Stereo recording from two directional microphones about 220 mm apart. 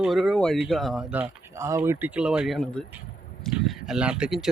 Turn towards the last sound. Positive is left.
turn(degrees=-5)  # may be behind; listen again after turning